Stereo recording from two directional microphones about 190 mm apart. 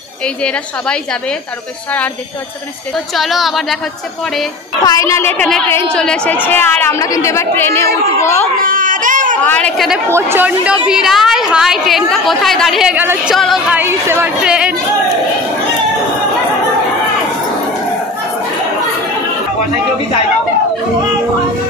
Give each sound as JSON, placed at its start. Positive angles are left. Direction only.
{"t": 3.2, "sound": "a woman's voice", "side_deg": 0}
{"t": 4.8, "sound": "a woman's voice", "side_deg": 15}
{"t": 8.5, "sound": "baby cry", "side_deg": -45}
{"t": 9.4, "sound": "a woman's voice", "side_deg": 5}
{"t": 10.0, "sound": "a woman's voice", "side_deg": -15}
{"t": 13.7, "sound": "a woman's voice", "side_deg": -15}